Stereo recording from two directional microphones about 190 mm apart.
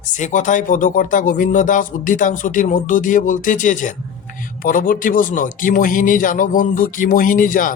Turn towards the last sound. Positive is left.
turn(degrees=45)  # may be behind; listen again after turning